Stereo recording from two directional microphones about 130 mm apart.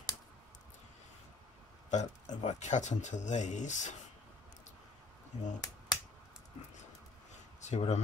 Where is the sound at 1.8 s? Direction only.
65° left (ahead or behind).